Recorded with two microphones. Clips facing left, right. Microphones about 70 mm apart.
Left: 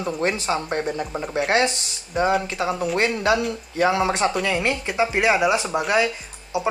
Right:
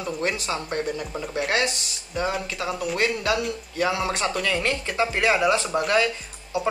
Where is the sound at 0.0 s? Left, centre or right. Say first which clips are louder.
Left 3 dB; left.